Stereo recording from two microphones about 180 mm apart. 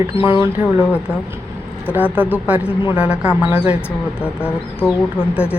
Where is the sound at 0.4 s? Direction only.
10° right (ahead or behind).